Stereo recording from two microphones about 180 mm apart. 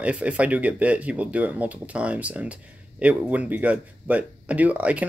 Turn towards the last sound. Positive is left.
turn(degrees=-10)  # may be behind; listen again after turning